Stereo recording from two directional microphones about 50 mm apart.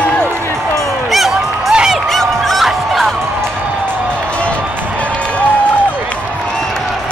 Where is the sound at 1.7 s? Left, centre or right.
Centre.